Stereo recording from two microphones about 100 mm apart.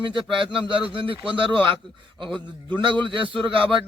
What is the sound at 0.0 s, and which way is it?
A man's voice, 55° right (ahead or behind).